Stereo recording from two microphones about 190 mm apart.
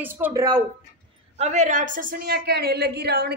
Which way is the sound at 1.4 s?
35° right (ahead or behind).